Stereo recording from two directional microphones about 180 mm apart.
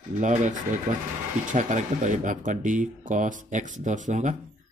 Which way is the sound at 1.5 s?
45° right (ahead or behind).